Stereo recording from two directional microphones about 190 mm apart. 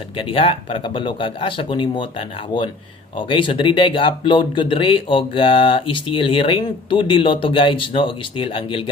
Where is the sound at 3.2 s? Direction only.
25° left (ahead or behind).